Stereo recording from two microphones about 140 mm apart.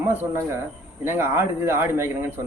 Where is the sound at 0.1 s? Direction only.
15° right (ahead or behind).